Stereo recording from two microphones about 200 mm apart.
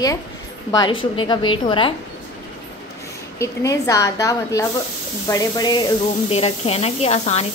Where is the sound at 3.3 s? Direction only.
15° left (ahead or behind).